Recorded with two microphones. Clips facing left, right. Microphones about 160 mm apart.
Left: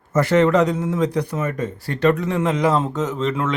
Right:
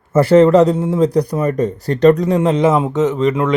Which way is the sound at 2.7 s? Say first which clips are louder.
Right 6 dB; 15° right (ahead or behind).